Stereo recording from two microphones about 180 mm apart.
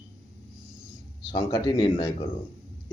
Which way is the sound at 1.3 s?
25° left (ahead or behind).